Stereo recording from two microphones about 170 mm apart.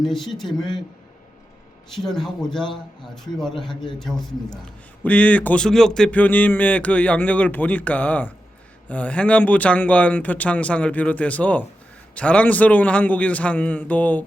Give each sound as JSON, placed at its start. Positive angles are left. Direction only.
{"t": 0.1, "sound": "speech", "side_deg": 0}
{"t": 2.0, "sound": "speech", "side_deg": 0}
{"t": 2.6, "sound": "a man's voice", "side_deg": 25}
{"t": 3.3, "sound": "a man's voice", "side_deg": 5}